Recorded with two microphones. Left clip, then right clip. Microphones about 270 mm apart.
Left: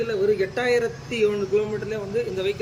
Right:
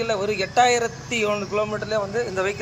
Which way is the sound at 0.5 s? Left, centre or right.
Right.